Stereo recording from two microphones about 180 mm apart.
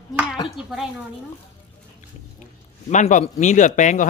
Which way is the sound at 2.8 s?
40° left (ahead or behind).